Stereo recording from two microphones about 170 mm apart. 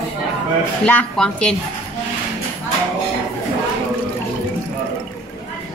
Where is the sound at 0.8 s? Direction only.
5° left (ahead or behind).